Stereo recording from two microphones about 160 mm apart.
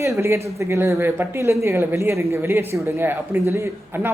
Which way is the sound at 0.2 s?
15° right (ahead or behind).